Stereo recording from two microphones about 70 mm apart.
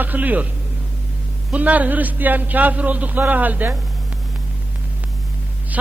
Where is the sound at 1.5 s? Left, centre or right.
Right.